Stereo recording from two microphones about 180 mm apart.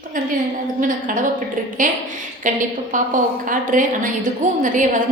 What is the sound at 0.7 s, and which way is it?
A woman's voice, 45° right (ahead or behind).